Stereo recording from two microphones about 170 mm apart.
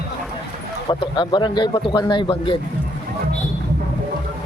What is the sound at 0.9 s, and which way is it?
A man's voice, 25° left (ahead or behind).